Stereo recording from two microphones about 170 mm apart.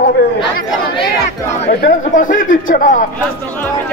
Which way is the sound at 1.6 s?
50° left (ahead or behind).